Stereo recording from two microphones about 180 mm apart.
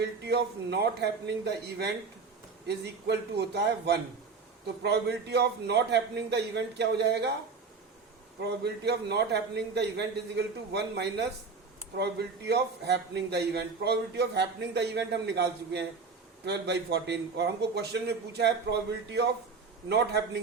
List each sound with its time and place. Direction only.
0.2 s a man's voice: 65° right (ahead or behind)
8.4 s a man's voice: 70° right (ahead or behind)